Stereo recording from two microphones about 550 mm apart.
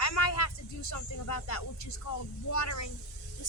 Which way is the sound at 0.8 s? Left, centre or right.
Left.